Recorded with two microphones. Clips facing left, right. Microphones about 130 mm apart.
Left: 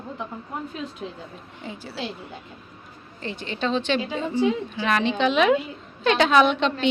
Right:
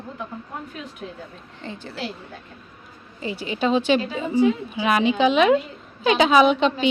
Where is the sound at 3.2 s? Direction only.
5° right (ahead or behind).